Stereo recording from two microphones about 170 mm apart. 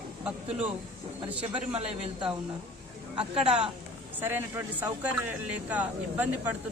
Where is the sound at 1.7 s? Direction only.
35° right (ahead or behind).